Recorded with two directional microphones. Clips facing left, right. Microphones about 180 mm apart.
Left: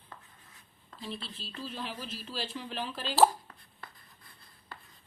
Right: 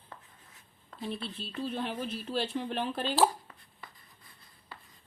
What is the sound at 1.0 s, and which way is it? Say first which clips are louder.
Speech: right 4 dB; 55° right (ahead or behind).